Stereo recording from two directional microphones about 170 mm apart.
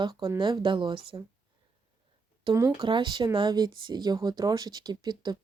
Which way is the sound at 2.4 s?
20° right (ahead or behind).